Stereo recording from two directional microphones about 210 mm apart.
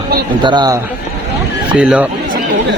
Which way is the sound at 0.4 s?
20° right (ahead or behind).